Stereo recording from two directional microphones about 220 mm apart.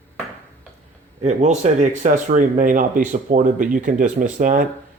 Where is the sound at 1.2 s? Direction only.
30° right (ahead or behind).